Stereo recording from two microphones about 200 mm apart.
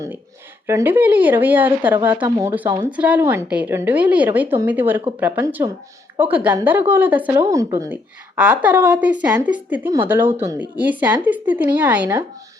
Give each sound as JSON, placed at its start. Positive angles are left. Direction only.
{"t": 0.7, "sound": "speech", "side_deg": -10}